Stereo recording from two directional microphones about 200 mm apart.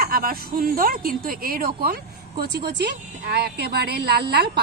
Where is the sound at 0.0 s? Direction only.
45° right (ahead or behind).